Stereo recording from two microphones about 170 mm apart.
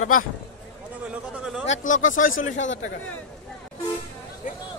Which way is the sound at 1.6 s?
50° left (ahead or behind).